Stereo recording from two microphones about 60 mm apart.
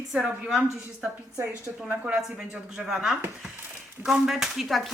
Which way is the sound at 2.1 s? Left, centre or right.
Centre.